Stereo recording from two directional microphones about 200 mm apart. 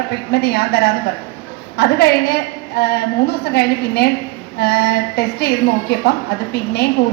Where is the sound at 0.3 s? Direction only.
55° left (ahead or behind).